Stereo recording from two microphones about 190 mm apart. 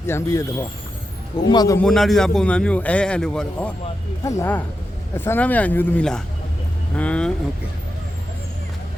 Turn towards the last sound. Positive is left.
turn(degrees=5)  # may be behind; listen again after turning